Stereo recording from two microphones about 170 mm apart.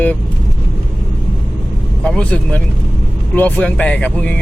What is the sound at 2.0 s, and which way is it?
Speech, 5° left (ahead or behind).